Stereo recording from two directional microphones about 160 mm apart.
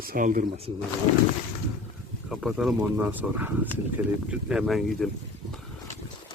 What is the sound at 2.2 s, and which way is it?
Speech, centre (ahead or behind).